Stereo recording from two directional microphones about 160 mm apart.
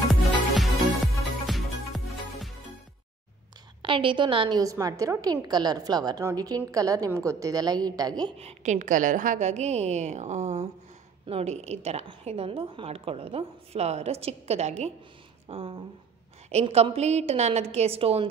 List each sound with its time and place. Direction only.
0.1 s music: centre (ahead or behind)
3.8 s a woman's voice: 30° right (ahead or behind)
8.4 s a woman's voice: 45° right (ahead or behind)